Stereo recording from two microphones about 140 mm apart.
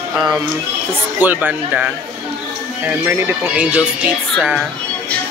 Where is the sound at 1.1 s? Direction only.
10° right (ahead or behind).